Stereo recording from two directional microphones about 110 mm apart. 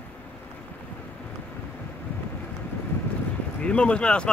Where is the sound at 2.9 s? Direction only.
15° left (ahead or behind).